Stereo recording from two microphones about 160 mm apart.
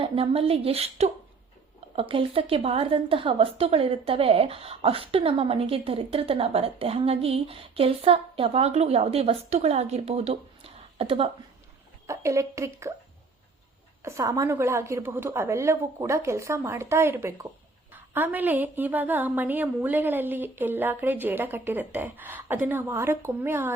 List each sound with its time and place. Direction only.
0.0 s a woman's voice: 35° right (ahead or behind)
12.0 s speech: 20° right (ahead or behind)
14.0 s a woman's voice: 20° right (ahead or behind)